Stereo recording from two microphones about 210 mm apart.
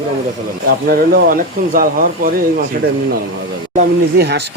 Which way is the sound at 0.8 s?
40° right (ahead or behind).